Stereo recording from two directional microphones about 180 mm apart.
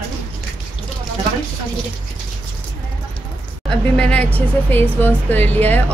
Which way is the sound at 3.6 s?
5° left (ahead or behind).